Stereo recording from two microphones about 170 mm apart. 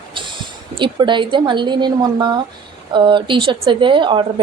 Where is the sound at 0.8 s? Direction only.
30° right (ahead or behind).